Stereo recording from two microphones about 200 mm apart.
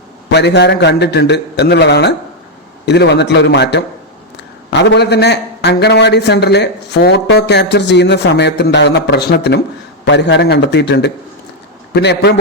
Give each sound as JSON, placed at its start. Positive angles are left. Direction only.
{"t": 0.3, "sound": "a man's voice", "side_deg": 55}